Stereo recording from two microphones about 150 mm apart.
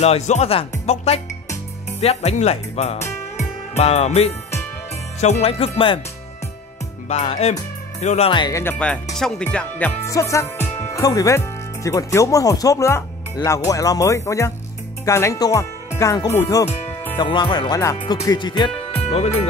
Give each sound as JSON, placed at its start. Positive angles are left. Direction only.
{"t": 0.0, "sound": "music", "side_deg": 45}
{"t": 7.1, "sound": "music", "side_deg": 45}
{"t": 8.3, "sound": "music", "side_deg": 30}
{"t": 8.5, "sound": "speech", "side_deg": 10}
{"t": 17.2, "sound": "speech", "side_deg": 30}
{"t": 19.0, "sound": "speech", "side_deg": 45}